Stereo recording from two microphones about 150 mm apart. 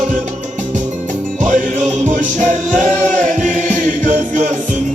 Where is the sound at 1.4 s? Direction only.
60° right (ahead or behind).